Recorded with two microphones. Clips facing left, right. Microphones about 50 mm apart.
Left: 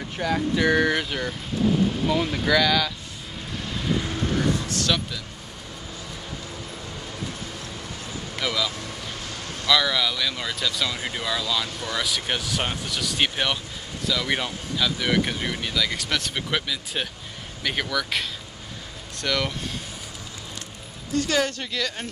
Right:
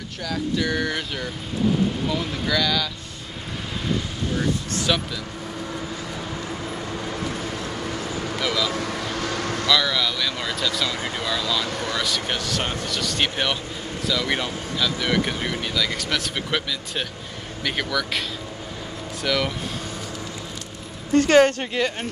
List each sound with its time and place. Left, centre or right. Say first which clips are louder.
0.2 s speech: left 3 dB; centre
4.9 s speech: right 2 dB; centre
7.8 s vehicle: right 7 dB; right
8.4 s speech: right 1 dB; centre
8.7 s vehicle: right 8 dB; right
9.7 s speech: left 1 dB; centre
11.6 s speech: right 5 dB; right
11.9 s speech: left 1 dB; centre
19.2 s speech: right 2 dB; centre
21.1 s a woman's voice: right 8 dB; right